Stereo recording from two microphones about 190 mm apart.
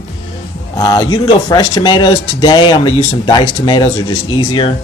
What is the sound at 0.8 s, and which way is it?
Speech, 20° left (ahead or behind).